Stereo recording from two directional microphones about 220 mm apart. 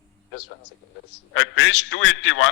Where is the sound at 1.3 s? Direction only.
60° left (ahead or behind).